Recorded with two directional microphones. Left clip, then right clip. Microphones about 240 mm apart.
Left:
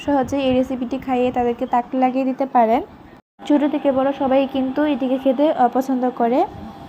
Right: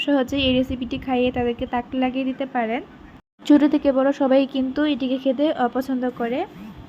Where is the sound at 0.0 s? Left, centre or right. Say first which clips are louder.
Left 2 dB; right.